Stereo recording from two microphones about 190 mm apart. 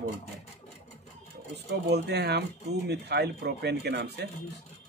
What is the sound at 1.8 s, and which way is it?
Speech, 60° right (ahead or behind).